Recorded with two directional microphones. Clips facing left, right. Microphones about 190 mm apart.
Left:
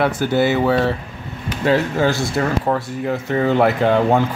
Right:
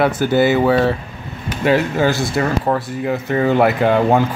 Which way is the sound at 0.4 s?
10° right (ahead or behind).